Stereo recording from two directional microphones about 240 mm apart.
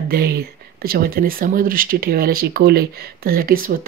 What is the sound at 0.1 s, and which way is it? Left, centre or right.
Speech, right.